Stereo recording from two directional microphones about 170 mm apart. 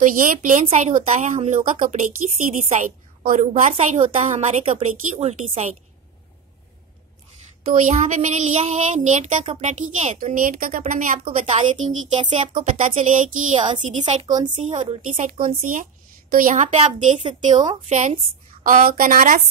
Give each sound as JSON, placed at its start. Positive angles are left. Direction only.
{"t": 0.1, "sound": "speech", "side_deg": -50}
{"t": 7.7, "sound": "speech", "side_deg": -50}
{"t": 12.2, "sound": "speech", "side_deg": -30}
{"t": 12.7, "sound": "speech", "side_deg": -50}
{"t": 14.2, "sound": "speech", "side_deg": -25}
{"t": 14.6, "sound": "speech", "side_deg": -40}